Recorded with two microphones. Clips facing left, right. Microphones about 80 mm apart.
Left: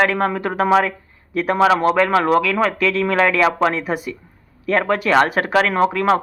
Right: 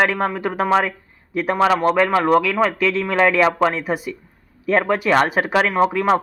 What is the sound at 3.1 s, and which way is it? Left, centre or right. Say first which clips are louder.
Speech: right 2 dB; right.